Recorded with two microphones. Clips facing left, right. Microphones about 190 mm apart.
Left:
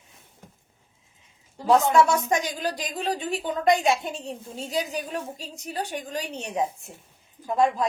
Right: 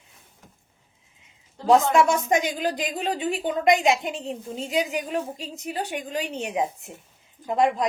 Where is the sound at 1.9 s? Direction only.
20° right (ahead or behind).